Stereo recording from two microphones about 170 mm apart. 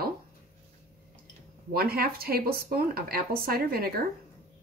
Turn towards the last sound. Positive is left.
turn(degrees=-60)  # may be behind; listen again after turning